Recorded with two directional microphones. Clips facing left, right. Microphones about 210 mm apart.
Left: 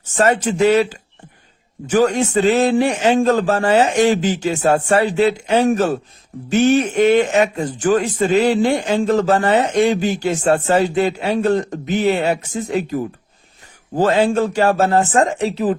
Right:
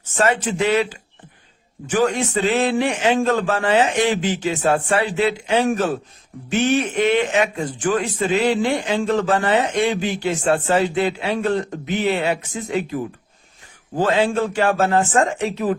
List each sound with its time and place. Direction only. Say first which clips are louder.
0.2 s a man's voice: left 4 dB; 40° left (ahead or behind)